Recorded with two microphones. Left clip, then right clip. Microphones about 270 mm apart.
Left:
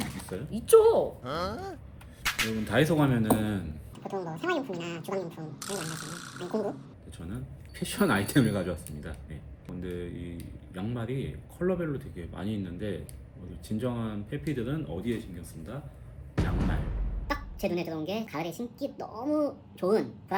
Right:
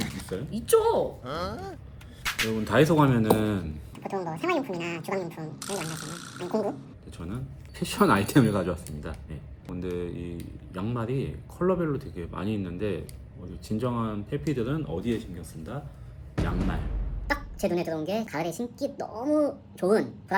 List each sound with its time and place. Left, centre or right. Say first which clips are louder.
0.0 s speech: right 3 dB; centre
2.2 s music: right 2 dB; centre
2.6 s speech: right 5 dB; centre
7.8 s speech: right 5 dB; centre
16.4 s a sound: right 2 dB; centre
18.3 s speech: right 4 dB; centre